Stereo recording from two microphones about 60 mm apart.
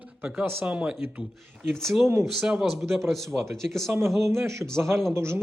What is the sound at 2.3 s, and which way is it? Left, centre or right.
A man's voice, centre.